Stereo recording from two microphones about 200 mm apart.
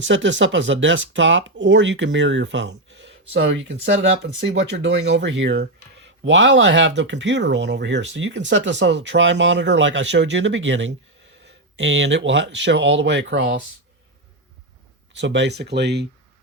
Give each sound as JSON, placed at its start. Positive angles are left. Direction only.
{"t": 0.0, "sound": "speech", "side_deg": -65}
{"t": 15.1, "sound": "speech", "side_deg": -60}